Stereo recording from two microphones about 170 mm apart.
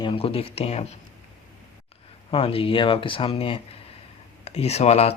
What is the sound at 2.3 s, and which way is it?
Speech, 35° left (ahead or behind).